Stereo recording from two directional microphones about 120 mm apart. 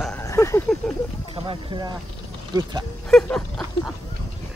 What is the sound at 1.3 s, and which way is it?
Speech, 45° right (ahead or behind).